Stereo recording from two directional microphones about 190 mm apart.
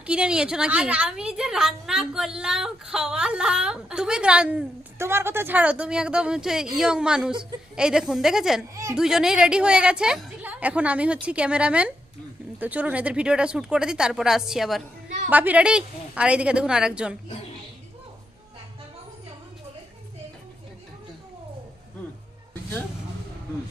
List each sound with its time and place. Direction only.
0.0 s a woman's voice: 5° right (ahead or behind)
8.7 s a woman's voice: 15° right (ahead or behind)
9.0 s a woman's voice: 5° right (ahead or behind)